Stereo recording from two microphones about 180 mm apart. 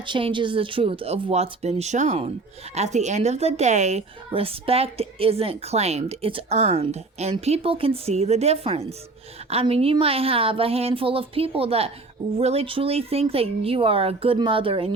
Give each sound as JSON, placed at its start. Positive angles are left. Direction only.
{"t": 0.0, "sound": "a woman's voice", "side_deg": -30}